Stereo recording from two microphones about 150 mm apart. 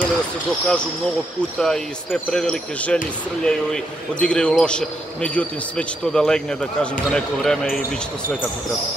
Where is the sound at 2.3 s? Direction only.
5° left (ahead or behind).